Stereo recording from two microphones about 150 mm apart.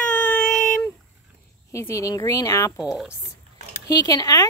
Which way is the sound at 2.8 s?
5° right (ahead or behind).